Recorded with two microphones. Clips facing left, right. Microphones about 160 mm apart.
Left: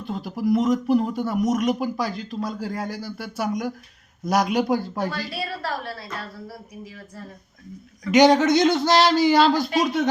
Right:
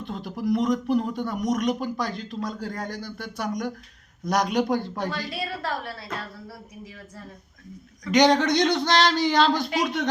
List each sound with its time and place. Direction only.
0.0 s speech: 5° left (ahead or behind)
5.3 s a woman's voice: 20° right (ahead or behind)
8.0 s speech: 5° left (ahead or behind)